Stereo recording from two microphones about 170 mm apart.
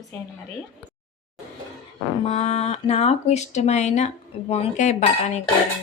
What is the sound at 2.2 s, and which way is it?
Speech, 40° left (ahead or behind).